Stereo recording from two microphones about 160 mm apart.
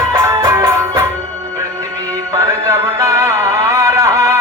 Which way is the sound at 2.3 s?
20° right (ahead or behind).